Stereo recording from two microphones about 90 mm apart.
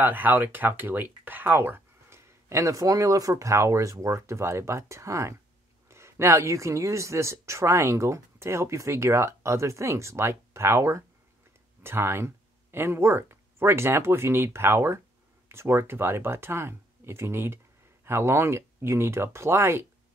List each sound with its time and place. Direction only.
0.0 s speech: 20° right (ahead or behind)